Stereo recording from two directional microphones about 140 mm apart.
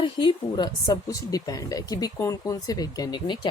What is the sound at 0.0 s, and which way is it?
Speech, 35° left (ahead or behind).